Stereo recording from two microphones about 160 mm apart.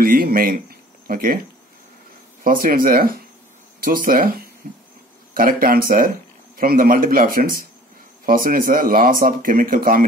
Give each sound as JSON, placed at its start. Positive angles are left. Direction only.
{"t": 0.0, "sound": "speech", "side_deg": -65}
{"t": 2.4, "sound": "speech", "side_deg": -65}